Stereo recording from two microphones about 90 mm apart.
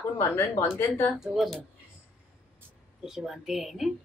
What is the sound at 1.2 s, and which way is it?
Speech, centre (ahead or behind).